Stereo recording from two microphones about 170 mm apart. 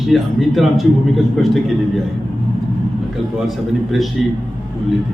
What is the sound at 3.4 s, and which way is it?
Speech, centre (ahead or behind).